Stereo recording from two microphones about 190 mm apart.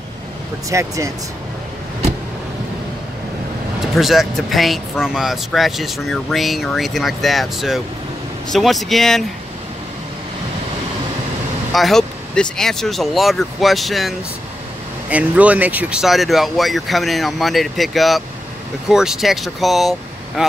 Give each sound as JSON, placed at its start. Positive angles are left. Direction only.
{"t": 0.7, "sound": "speech", "side_deg": -15}
{"t": 3.9, "sound": "speech", "side_deg": 0}
{"t": 11.7, "sound": "speech", "side_deg": 0}